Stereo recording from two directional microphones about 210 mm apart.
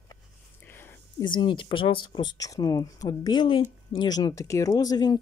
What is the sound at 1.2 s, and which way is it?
Speech, 25° left (ahead or behind).